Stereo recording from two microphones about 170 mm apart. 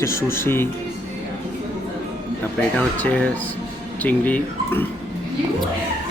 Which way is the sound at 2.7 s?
10° left (ahead or behind).